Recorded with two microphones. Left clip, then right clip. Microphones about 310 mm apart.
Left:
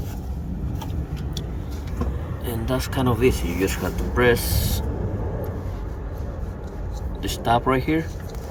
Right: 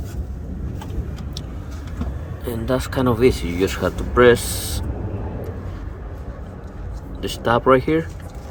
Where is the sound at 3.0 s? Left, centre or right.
Centre.